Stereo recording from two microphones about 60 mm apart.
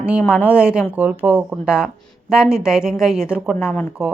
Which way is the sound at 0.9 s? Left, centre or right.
Right.